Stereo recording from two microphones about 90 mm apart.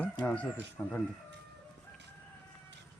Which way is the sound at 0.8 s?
20° left (ahead or behind).